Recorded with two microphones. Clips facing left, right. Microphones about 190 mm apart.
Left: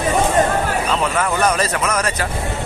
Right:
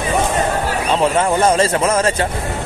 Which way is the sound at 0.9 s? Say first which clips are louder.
Right 8 dB; 30° right (ahead or behind).